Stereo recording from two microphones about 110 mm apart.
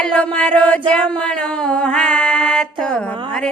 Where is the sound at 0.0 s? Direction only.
10° left (ahead or behind).